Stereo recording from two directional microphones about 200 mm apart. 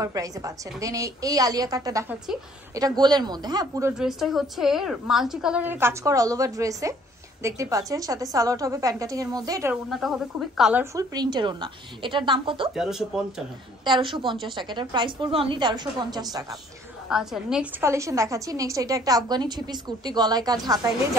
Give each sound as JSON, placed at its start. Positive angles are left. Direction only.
{"t": 0.0, "sound": "a woman's voice", "side_deg": -15}
{"t": 4.0, "sound": "a woman's voice", "side_deg": 0}
{"t": 9.8, "sound": "a woman's voice", "side_deg": 0}
{"t": 12.7, "sound": "a woman's voice", "side_deg": 0}
{"t": 13.8, "sound": "a woman's voice", "side_deg": -25}
{"t": 17.1, "sound": "a woman's voice", "side_deg": 0}